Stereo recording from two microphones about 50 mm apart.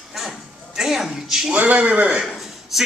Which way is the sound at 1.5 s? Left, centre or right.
Right.